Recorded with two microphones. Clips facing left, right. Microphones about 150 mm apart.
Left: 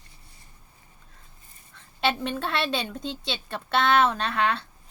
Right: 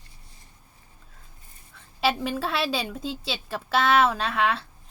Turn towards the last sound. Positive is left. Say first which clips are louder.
# right 1 dB
turn(degrees=0)  # may be behind; listen again after turning